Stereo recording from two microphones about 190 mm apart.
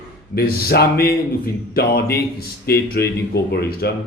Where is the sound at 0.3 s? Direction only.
55° left (ahead or behind).